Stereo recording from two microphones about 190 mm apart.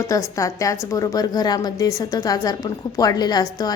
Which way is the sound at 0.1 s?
15° left (ahead or behind).